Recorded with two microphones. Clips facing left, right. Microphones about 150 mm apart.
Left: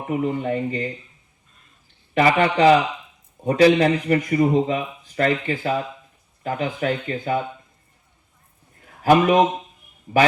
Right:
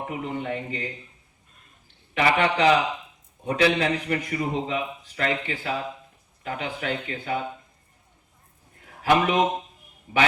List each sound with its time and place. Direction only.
0.1 s speech: 40° left (ahead or behind)
2.1 s a man's voice: 40° left (ahead or behind)
9.0 s a man's voice: 40° left (ahead or behind)